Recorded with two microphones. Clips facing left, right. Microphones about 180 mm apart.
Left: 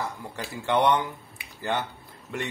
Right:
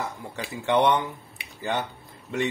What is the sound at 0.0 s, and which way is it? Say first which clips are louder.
Speech: right 1 dB; 20° right (ahead or behind).